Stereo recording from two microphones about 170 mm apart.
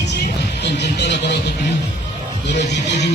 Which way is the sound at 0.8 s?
85° left.